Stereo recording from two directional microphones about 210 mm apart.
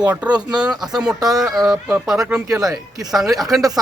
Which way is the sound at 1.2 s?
20° right (ahead or behind).